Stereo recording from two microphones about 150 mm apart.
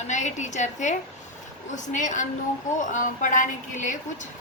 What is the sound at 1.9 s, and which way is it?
A woman's voice, 55° left (ahead or behind).